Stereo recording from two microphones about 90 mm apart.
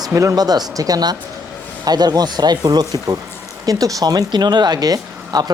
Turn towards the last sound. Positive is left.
turn(degrees=-45)  # may be behind; listen again after turning